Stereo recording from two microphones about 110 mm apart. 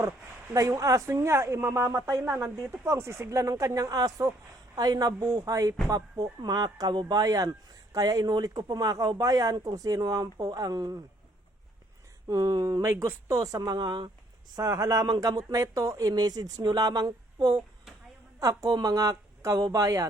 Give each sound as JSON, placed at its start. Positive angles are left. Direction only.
{"t": 0.5, "sound": "a woman's voice", "side_deg": -30}
{"t": 12.3, "sound": "speech", "side_deg": -35}